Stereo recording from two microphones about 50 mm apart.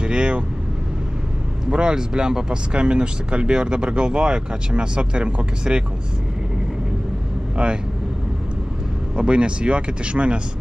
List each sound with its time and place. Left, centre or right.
0.0 s vehicle: centre
1.7 s speech: centre
7.5 s speech: centre
9.1 s speech: right